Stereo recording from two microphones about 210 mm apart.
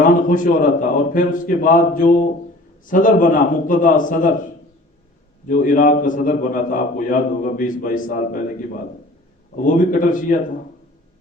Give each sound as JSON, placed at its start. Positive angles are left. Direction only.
{"t": 0.0, "sound": "a man's voice", "side_deg": 40}
{"t": 5.5, "sound": "a man's voice", "side_deg": 40}
{"t": 9.6, "sound": "a man's voice", "side_deg": 40}